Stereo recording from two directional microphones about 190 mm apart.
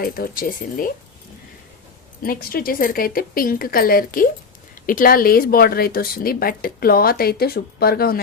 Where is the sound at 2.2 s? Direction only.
50° left (ahead or behind).